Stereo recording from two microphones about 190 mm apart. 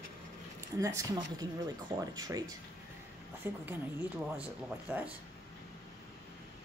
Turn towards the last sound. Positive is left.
turn(degrees=-5)  # may be behind; listen again after turning